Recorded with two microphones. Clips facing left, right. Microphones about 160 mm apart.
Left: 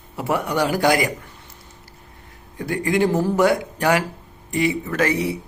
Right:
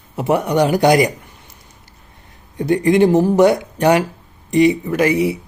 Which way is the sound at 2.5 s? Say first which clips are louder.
Right 7 dB; 25° right (ahead or behind).